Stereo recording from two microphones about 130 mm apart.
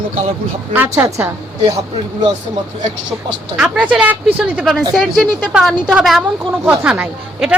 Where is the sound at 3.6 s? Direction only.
10° right (ahead or behind).